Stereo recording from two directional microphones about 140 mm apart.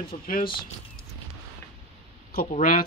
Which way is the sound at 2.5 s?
75° left (ahead or behind).